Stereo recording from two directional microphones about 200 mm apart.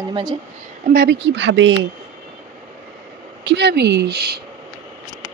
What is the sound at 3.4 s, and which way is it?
A woman's voice, 60° right (ahead or behind).